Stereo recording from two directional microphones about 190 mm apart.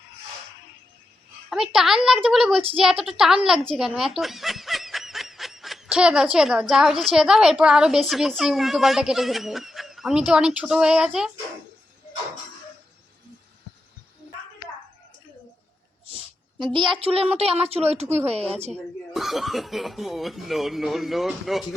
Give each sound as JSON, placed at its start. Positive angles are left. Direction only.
{"t": 1.5, "sound": "speech", "side_deg": 0}
{"t": 16.0, "sound": "a sound", "side_deg": -30}
{"t": 16.7, "sound": "a woman's voice", "side_deg": -25}
{"t": 19.1, "sound": "speech", "side_deg": 0}